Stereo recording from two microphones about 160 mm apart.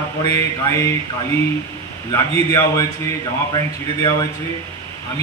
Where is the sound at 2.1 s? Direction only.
15° left (ahead or behind).